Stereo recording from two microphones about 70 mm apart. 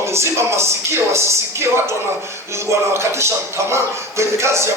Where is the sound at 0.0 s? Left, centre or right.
Right.